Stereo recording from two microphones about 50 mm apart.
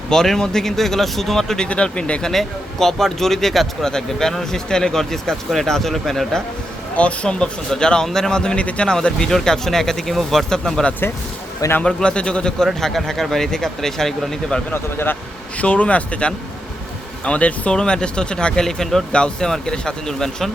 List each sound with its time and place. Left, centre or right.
0.1 s speech: centre
1.6 s speech: left
2.2 s speech: centre
6.9 s speech: left; by 14.3 s centre
14.7 s speech: left
15.5 s speech: left; by 20.5 s centre